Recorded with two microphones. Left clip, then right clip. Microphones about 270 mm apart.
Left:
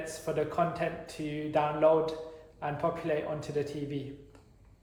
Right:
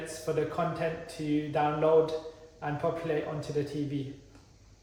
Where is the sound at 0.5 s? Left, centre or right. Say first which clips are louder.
Left 1 dB; left.